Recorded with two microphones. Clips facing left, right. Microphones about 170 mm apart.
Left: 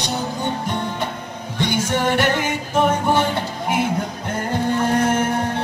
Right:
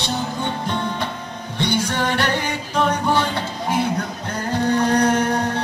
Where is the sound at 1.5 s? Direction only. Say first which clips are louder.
Even; 45° left (ahead or behind).